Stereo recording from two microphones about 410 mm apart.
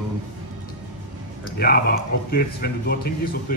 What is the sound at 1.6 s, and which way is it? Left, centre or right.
Speech, left.